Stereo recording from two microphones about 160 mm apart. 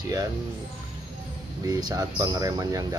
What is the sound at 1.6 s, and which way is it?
Speech, 20° right (ahead or behind).